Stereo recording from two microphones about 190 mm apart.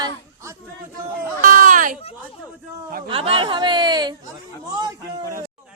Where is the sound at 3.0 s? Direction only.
30° right (ahead or behind).